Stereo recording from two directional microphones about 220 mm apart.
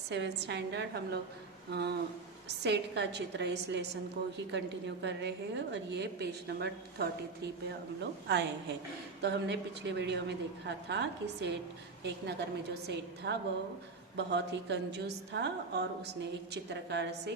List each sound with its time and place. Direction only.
0.1 s a woman's voice: 50° right (ahead or behind)